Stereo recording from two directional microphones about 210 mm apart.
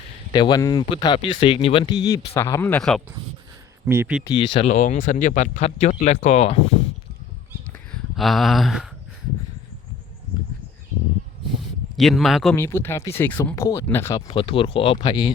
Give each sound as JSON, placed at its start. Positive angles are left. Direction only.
{"t": 0.3, "sound": "speech", "side_deg": 20}
{"t": 3.8, "sound": "speech", "side_deg": -10}
{"t": 4.2, "sound": "speech", "side_deg": 20}
{"t": 7.9, "sound": "a sound", "side_deg": 0}
{"t": 11.9, "sound": "speech", "side_deg": 0}
{"t": 12.5, "sound": "speech", "side_deg": 10}